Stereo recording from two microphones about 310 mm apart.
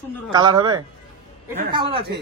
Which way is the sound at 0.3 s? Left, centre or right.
Centre.